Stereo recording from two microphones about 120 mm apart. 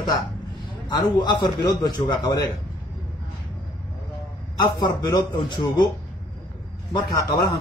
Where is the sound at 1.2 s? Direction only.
35° left (ahead or behind).